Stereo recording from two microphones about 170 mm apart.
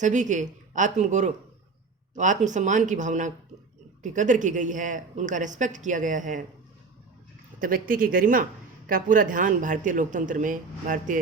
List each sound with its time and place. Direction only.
0.0 s speech: 45° right (ahead or behind)
7.6 s speech: 55° right (ahead or behind)